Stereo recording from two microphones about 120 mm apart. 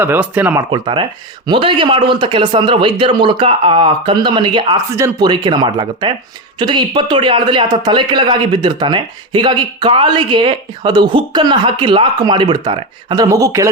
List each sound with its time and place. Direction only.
0.0 s speech: 15° right (ahead or behind)
0.7 s speech: 45° right (ahead or behind)
4.9 s speech: 25° right (ahead or behind)
5.2 s speech: 40° right (ahead or behind)
13.2 s speech: 30° right (ahead or behind)